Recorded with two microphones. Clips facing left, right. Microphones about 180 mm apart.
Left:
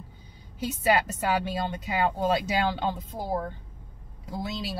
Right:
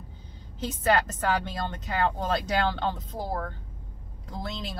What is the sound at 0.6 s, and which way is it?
A woman's voice, 10° left (ahead or behind).